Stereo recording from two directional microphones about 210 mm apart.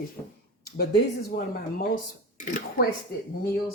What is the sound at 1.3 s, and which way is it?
Speech, 50° left (ahead or behind).